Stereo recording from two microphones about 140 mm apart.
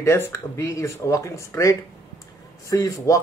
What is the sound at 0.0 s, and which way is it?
Speech, 20° left (ahead or behind).